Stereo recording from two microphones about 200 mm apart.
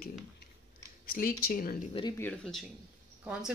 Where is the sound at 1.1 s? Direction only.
45° left (ahead or behind).